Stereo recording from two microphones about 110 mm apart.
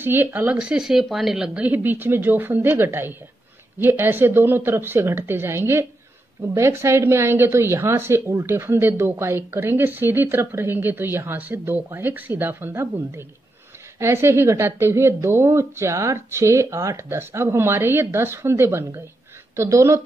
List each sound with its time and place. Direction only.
0.0 s a woman's voice: 20° right (ahead or behind)